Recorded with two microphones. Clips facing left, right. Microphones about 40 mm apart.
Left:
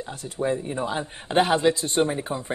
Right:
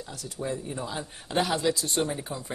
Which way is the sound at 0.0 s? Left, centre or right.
Left.